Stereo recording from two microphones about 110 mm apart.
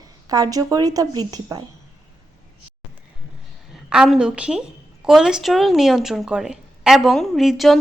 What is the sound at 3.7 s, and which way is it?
A woman's voice, 5° right (ahead or behind).